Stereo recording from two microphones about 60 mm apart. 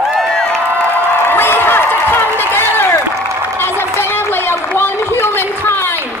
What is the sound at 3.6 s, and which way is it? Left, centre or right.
Run, left.